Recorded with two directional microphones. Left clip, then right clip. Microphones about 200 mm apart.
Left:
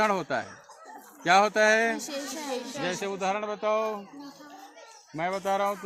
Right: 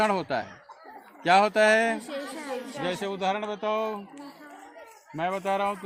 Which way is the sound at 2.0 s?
55° left (ahead or behind).